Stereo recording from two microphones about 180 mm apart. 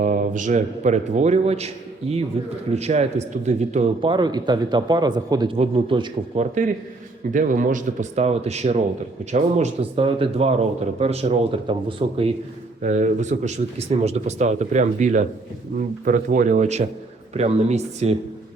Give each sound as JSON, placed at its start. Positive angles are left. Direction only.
{"t": 0.0, "sound": "a man's voice", "side_deg": -45}
{"t": 12.8, "sound": "speech", "side_deg": -40}